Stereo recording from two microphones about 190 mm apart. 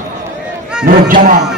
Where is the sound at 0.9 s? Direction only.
45° right (ahead or behind).